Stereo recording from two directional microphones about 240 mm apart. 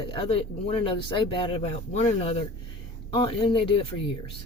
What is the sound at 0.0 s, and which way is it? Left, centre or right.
Speech, left.